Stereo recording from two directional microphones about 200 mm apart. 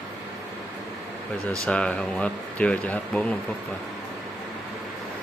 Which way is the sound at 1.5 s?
5° left (ahead or behind).